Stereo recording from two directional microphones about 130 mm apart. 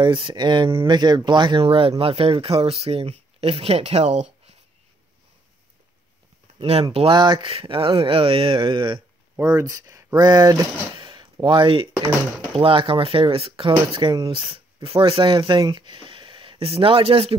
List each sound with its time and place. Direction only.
0.0 s speech: 40° right (ahead or behind); by 4.6 s 55° right (ahead or behind)
6.6 s speech: 50° right (ahead or behind)
9.4 s speech: 25° right (ahead or behind)
11.0 s a sound: 40° right (ahead or behind)
11.4 s speech: 40° right (ahead or behind)